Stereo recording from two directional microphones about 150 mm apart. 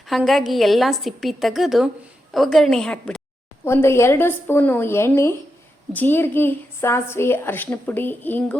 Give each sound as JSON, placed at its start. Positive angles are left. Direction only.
{"t": 0.1, "sound": "a woman's voice", "side_deg": 0}
{"t": 3.6, "sound": "a woman's voice", "side_deg": 15}